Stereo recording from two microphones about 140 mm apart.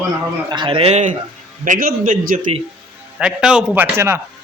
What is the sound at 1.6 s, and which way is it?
Speech, 80° right.